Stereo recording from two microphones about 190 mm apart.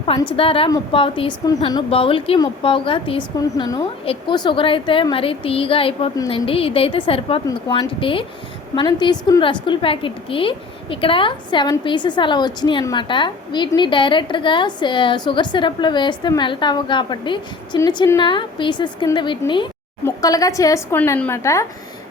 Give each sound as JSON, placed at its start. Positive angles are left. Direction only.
{"t": 0.3, "sound": "a woman's voice", "side_deg": 30}